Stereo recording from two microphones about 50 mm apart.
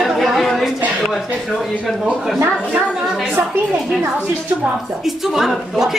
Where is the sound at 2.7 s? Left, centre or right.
Centre.